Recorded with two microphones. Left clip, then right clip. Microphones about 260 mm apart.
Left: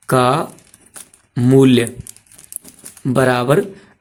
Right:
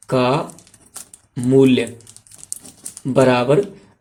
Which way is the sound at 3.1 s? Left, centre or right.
Left.